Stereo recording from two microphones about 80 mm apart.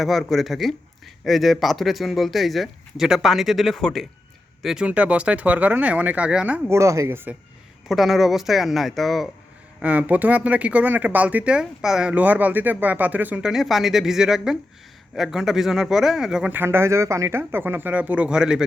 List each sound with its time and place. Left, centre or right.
0.0 s speech: centre
4.6 s speech: centre
4.9 s speech: centre
6.7 s speech: right
7.9 s speech: centre
9.8 s speech: centre
12.1 s speech: centre
13.4 s speech: centre
16.5 s speech: right; by 18.6 s centre